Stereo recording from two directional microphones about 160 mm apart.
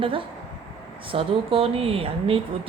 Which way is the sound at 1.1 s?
35° right (ahead or behind).